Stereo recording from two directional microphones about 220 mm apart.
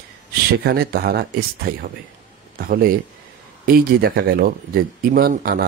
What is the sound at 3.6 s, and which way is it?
Speech, 45° right (ahead or behind).